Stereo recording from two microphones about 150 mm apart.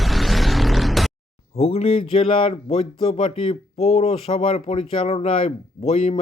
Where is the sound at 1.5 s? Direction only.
40° left (ahead or behind).